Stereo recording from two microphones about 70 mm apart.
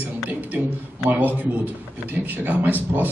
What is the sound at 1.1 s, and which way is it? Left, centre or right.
A man's voice, right.